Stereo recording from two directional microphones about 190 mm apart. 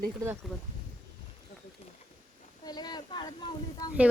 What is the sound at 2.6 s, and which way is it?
Speech, 20° left (ahead or behind).